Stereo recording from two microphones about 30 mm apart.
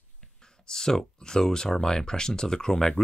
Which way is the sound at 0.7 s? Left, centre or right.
Left.